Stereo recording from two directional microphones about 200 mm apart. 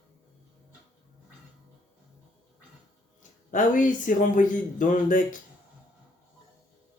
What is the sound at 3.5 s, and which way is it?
Speech, 40° left (ahead or behind).